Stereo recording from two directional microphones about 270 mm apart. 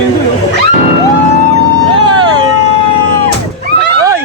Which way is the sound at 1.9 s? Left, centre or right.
Centre.